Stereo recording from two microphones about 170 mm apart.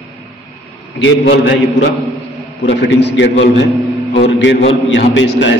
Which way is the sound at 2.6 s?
90° left.